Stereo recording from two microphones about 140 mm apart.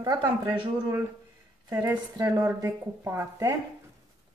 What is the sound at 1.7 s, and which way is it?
A woman's voice, 15° right (ahead or behind).